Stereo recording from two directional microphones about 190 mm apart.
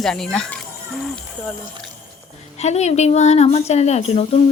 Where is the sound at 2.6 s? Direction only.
35° left (ahead or behind).